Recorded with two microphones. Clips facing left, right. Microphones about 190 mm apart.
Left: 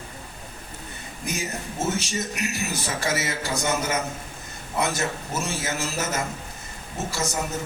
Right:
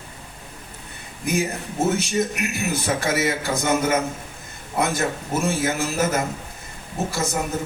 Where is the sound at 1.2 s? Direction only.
55° right (ahead or behind).